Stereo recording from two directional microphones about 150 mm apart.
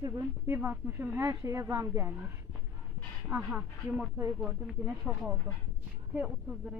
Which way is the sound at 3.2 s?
5° right (ahead or behind).